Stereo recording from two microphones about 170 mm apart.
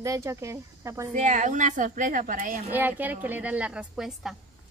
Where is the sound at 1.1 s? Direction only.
45° right (ahead or behind).